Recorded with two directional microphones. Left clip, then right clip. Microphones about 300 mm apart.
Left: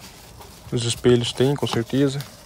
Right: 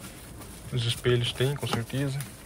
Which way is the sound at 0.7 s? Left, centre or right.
Left.